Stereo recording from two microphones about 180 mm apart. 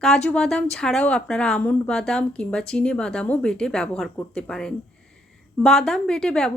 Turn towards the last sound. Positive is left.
turn(degrees=5)  # may be behind; listen again after turning